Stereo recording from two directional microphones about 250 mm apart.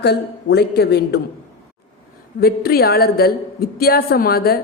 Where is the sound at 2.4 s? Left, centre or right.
Left.